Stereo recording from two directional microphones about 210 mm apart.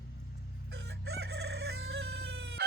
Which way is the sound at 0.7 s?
55° right (ahead or behind).